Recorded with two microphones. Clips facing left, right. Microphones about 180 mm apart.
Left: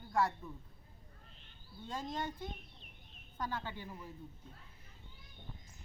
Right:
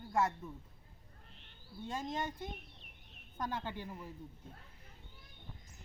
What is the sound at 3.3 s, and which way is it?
Speech, 20° right (ahead or behind).